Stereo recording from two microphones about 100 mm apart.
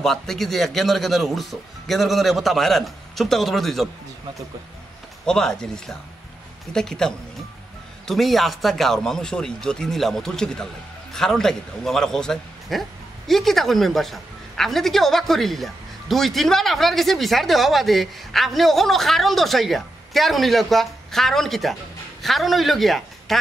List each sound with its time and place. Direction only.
0.0 s a woman's voice: 5° left (ahead or behind)
5.2 s a woman's voice: 5° left (ahead or behind)